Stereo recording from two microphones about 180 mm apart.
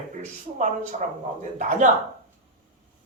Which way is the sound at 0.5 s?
45° right (ahead or behind).